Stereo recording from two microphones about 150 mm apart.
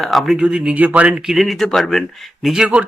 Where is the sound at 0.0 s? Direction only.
Centre (ahead or behind).